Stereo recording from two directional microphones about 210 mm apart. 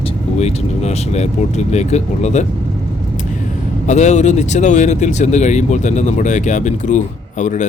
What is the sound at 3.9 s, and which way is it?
Speech, 35° left (ahead or behind).